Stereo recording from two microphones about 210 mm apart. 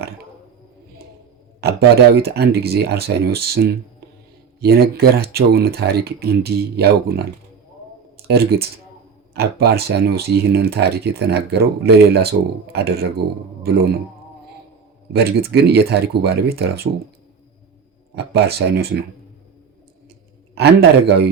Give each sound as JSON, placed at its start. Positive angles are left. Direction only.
{"t": 1.6, "sound": "speech", "side_deg": -50}
{"t": 8.3, "sound": "speech", "side_deg": -50}
{"t": 15.1, "sound": "speech", "side_deg": -50}
{"t": 18.1, "sound": "speech", "side_deg": -50}